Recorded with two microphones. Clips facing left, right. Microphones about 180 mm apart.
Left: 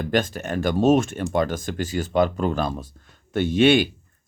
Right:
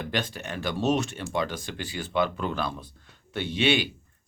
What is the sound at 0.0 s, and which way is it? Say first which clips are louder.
Speech: left 8 dB; 45° left (ahead or behind).